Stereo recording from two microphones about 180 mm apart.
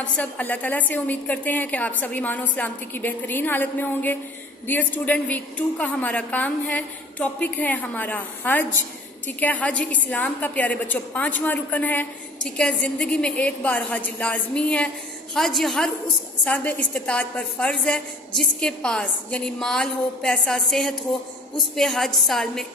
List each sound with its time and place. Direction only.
0.2 s a woman's voice: 10° left (ahead or behind)